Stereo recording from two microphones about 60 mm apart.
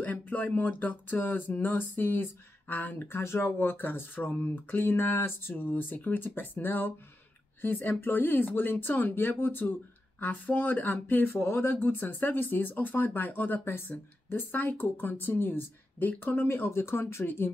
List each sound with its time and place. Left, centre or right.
0.0 s speech: left
16.5 s speech: left